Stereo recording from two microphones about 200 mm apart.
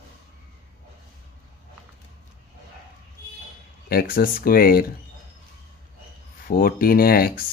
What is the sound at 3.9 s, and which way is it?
Speech, 50° left (ahead or behind).